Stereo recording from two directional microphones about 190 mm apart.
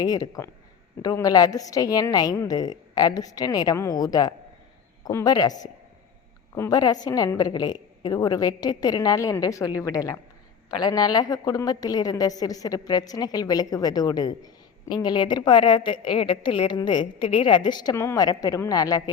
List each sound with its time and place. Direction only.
0.0 s a woman's voice: 20° left (ahead or behind)